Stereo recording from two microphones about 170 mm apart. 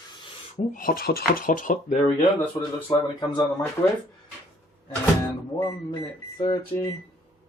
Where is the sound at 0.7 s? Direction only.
55° left (ahead or behind).